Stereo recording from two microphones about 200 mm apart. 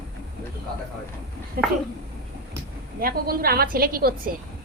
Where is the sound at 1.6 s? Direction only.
50° right (ahead or behind).